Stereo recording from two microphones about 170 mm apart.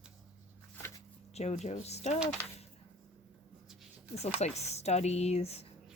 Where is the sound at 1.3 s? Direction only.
40° left (ahead or behind).